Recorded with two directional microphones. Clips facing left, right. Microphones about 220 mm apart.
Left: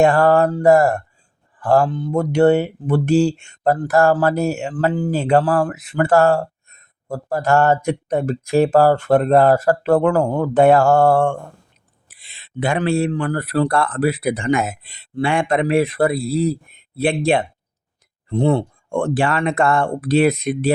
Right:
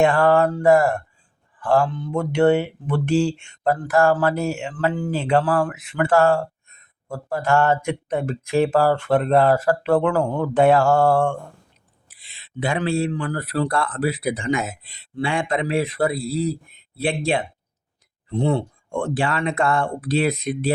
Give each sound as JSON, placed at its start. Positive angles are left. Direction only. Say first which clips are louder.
{"t": 0.0, "sound": "speech", "louder": "left 3 dB", "side_deg": 40}
{"t": 17.0, "sound": "speech", "louder": "left 5 dB", "side_deg": 55}